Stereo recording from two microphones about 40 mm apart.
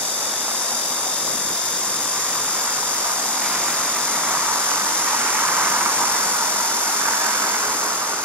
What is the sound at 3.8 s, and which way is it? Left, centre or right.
Vehicle, left.